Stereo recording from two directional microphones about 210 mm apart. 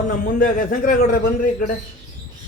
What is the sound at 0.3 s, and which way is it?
A man's voice, 40° left (ahead or behind).